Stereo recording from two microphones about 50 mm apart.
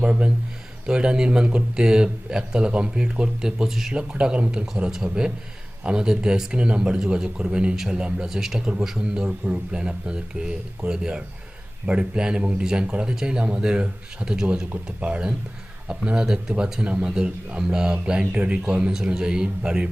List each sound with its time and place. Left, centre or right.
0.0 s speech: right; by 3.9 s centre
3.9 s speech: centre
12.6 s speech: centre